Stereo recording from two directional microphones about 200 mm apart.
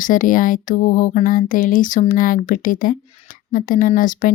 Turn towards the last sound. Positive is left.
turn(degrees=40)  # may be behind; listen again after turning